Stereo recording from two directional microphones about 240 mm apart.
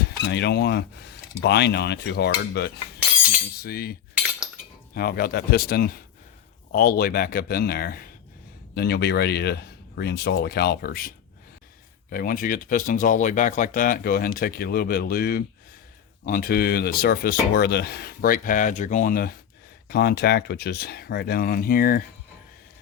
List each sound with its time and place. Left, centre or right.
0.0 s speech: left
4.9 s speech: left
12.1 s speech: left